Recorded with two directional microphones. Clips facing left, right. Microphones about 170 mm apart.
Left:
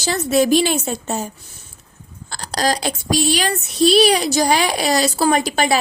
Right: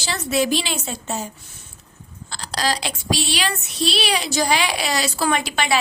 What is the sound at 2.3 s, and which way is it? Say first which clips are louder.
Speech: left 4 dB; 45° left (ahead or behind).